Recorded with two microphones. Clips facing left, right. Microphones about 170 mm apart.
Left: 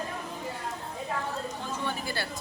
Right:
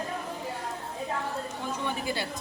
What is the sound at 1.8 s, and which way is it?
Chatter, 20° right (ahead or behind).